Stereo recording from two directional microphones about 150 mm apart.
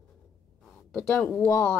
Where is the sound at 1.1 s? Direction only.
10° left (ahead or behind).